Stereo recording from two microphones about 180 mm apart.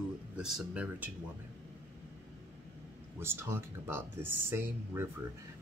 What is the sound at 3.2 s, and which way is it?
Speech, 15° right (ahead or behind).